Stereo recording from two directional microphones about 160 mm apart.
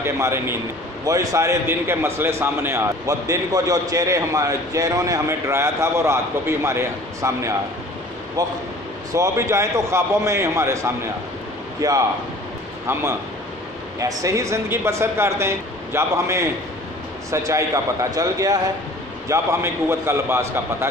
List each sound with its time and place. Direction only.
0.0 s a man's voice: 15° right (ahead or behind)
13.9 s a man's voice: 20° right (ahead or behind)